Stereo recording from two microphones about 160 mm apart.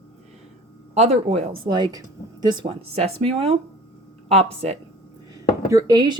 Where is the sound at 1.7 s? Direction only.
25° right (ahead or behind).